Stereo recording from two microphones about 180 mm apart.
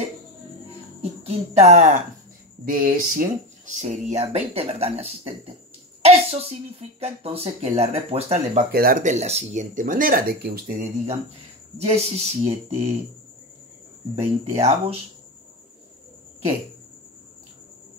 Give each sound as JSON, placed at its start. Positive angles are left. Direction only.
{"t": 1.2, "sound": "speech", "side_deg": -35}
{"t": 2.6, "sound": "speech", "side_deg": -50}
{"t": 3.7, "sound": "speech", "side_deg": -40}
{"t": 8.7, "sound": "speech", "side_deg": -50}
{"t": 11.8, "sound": "speech", "side_deg": -35}
{"t": 14.1, "sound": "speech", "side_deg": -35}